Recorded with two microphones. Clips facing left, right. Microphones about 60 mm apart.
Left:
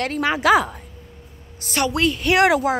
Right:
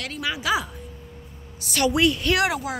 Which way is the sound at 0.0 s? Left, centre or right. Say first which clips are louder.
Left 8 dB; left.